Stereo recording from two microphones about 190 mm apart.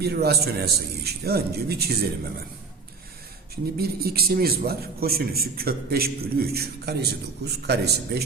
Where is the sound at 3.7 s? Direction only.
55° right (ahead or behind).